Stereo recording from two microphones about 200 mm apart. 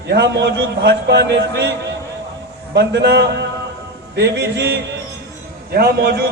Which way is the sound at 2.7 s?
60° right (ahead or behind).